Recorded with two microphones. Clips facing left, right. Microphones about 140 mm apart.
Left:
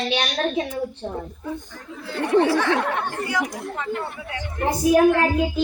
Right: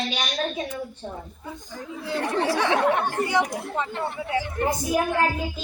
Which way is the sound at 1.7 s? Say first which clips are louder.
Right 3 dB; 15° right (ahead or behind).